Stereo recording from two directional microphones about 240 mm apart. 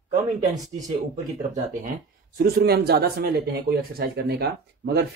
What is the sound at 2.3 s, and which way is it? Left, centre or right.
Speech, right.